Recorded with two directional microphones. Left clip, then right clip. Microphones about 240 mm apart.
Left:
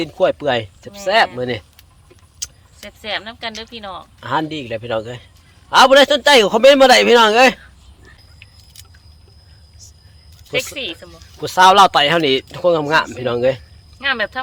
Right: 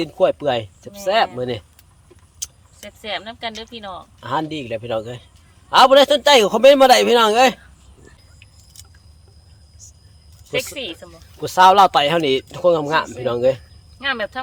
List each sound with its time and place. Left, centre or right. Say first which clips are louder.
0.0 s speech: left 1 dB; centre
2.4 s vehicle: left 2 dB; centre
2.8 s speech: left 3 dB; centre
4.2 s speech: left 3 dB; centre
9.8 s vehicle: left 1 dB; centre
10.5 s speech: left 2 dB; centre
11.3 s speech: left 2 dB; centre
14.0 s speech: left 3 dB; centre